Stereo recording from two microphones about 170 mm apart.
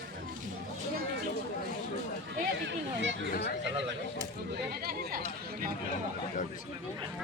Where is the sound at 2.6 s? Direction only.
90° right.